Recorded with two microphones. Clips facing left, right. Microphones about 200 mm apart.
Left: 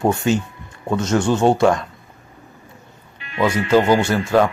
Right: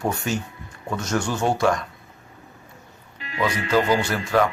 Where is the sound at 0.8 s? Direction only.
25° left (ahead or behind).